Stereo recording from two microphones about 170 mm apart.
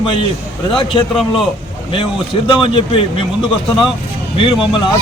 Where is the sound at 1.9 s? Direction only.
30° left (ahead or behind).